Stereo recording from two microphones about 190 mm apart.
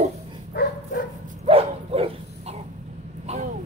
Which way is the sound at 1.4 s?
30° right (ahead or behind).